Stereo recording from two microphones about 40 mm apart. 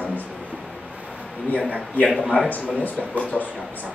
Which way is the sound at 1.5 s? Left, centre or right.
Left.